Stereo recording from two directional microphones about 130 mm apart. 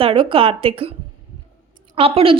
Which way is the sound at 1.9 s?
45° right (ahead or behind).